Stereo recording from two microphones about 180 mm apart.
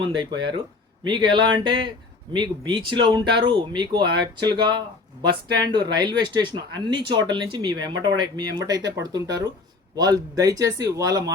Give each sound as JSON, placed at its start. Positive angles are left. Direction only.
{"t": 0.0, "sound": "speech", "side_deg": -25}
{"t": 5.7, "sound": "speech", "side_deg": -25}